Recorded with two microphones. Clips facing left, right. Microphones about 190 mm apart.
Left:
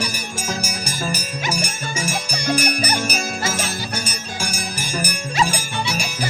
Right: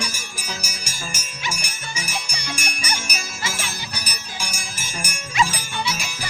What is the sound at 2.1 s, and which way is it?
Music, 50° left (ahead or behind).